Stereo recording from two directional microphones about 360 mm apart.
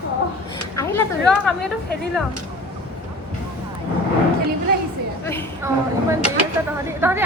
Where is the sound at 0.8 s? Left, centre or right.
Centre.